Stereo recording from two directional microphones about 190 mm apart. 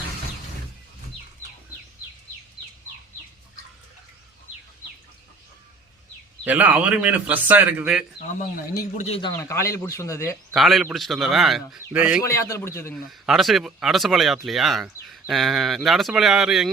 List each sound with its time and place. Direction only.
6.4 s a man's voice: 10° right (ahead or behind)
9.0 s speech: 30° left (ahead or behind)
9.4 s speech: 15° left (ahead or behind)
10.5 s speech: centre (ahead or behind)
11.8 s a man's voice: 10° right (ahead or behind)
12.2 s speech: 15° left (ahead or behind)
13.1 s speech: centre (ahead or behind)